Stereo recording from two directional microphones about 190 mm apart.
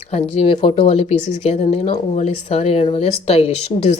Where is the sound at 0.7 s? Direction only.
30° left (ahead or behind).